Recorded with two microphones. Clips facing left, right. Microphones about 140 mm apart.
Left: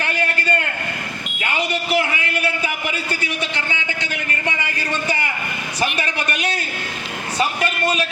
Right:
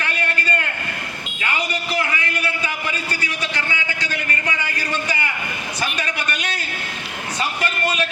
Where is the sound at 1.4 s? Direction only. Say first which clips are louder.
Left 2 dB; 30° left (ahead or behind).